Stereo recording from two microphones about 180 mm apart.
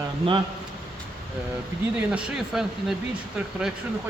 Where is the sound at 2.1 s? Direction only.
5° right (ahead or behind).